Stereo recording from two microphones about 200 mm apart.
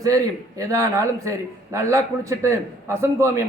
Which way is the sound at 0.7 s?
15° right (ahead or behind).